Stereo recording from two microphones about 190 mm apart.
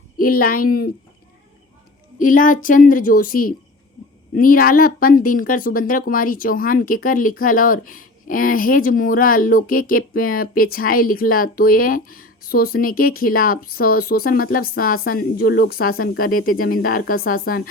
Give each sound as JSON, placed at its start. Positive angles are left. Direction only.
{"t": 0.2, "sound": "a woman's voice", "side_deg": 50}
{"t": 2.1, "sound": "a woman's voice", "side_deg": 45}